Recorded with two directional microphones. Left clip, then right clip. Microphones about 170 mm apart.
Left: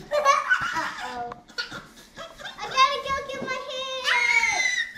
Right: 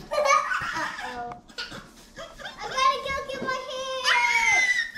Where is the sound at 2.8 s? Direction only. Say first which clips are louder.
Left 2 dB; 10° left (ahead or behind).